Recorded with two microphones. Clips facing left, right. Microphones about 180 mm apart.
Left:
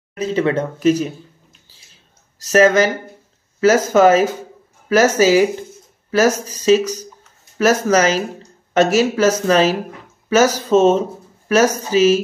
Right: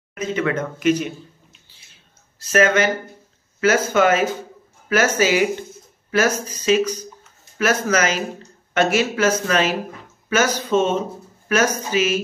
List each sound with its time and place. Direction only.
0.1 s speech: 35° left (ahead or behind)
2.4 s speech: 35° left (ahead or behind)